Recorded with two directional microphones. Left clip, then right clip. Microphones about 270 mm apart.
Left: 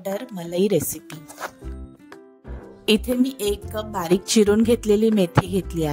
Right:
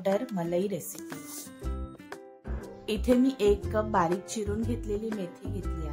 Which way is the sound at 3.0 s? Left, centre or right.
Centre.